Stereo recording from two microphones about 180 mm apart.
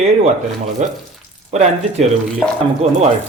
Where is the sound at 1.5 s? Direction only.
35° right (ahead or behind).